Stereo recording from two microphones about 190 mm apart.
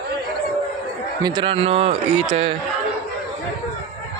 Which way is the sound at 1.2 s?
25° right (ahead or behind).